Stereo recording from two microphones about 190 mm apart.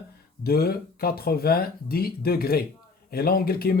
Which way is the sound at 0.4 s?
55° left (ahead or behind).